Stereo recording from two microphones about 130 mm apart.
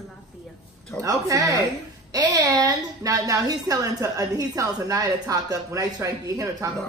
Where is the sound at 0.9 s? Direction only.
25° right (ahead or behind).